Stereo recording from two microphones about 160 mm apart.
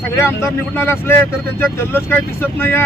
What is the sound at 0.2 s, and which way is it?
Speech, 15° left (ahead or behind).